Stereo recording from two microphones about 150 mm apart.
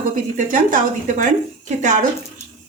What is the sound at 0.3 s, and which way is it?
A woman's voice, 60° right (ahead or behind).